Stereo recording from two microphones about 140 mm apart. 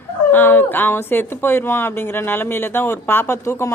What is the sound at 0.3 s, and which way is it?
Speech, 15° left (ahead or behind).